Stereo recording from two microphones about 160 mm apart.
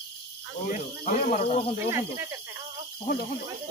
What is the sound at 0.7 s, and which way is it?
Speech, 45° left (ahead or behind).